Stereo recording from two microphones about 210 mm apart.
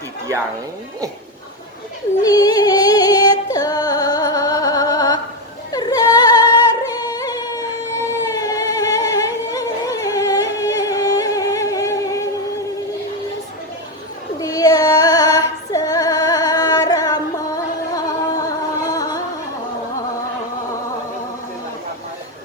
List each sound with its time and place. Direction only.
2.2 s music: 15° left (ahead or behind)
5.7 s yodeling: 15° left (ahead or behind)
6.8 s music: 15° left (ahead or behind)
8.3 s humming: 15° left (ahead or behind)
14.4 s female singing: 15° left (ahead or behind)